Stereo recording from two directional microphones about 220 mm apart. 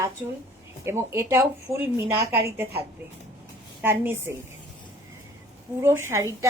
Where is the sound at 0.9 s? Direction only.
10° right (ahead or behind).